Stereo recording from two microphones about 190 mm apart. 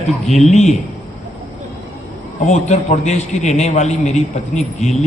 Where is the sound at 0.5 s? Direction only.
35° left (ahead or behind).